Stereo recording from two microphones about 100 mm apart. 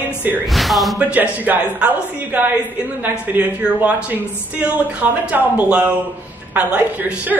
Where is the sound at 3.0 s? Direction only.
15° right (ahead or behind).